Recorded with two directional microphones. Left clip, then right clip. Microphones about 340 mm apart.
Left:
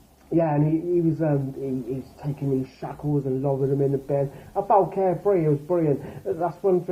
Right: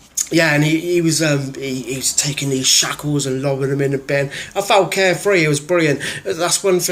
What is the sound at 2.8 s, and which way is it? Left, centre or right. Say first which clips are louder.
A man's voice: right 9 dB; right.